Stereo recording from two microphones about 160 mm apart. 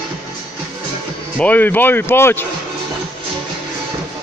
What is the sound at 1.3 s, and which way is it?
Speech, 10° left (ahead or behind).